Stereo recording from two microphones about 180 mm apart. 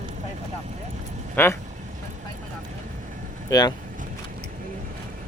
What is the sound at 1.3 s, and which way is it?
Speech, 15° left (ahead or behind).